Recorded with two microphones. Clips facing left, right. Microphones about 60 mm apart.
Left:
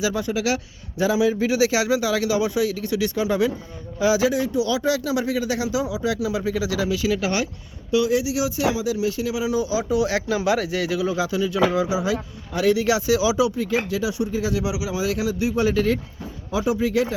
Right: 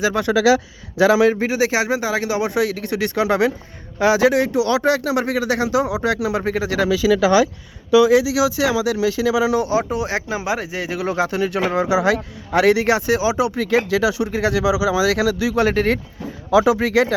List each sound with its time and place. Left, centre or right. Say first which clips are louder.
0.0 s speech: right 4 dB; right
0.9 s speech: right 6 dB; right
1.4 s speech: right 1 dB; right
8.4 s speech: right 5 dB; right
10.0 s speech: left 1 dB; right
10.9 s speech: right 5 dB; right
11.9 s speech: right 6 dB; right
12.8 s speech: right 2 dB; right
13.6 s speech: right 6 dB; right
15.7 s speech: right 2 dB; right
16.5 s speech: right 7 dB; right